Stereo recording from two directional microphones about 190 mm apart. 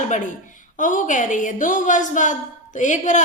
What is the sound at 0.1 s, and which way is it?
A woman's voice, 40° left (ahead or behind).